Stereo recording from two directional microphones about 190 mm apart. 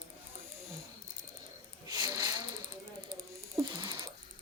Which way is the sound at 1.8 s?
20° right (ahead or behind).